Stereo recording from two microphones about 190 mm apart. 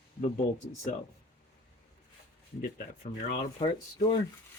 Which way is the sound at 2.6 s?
45° left (ahead or behind).